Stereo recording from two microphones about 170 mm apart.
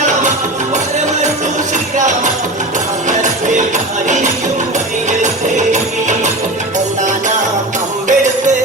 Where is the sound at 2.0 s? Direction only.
45° right (ahead or behind).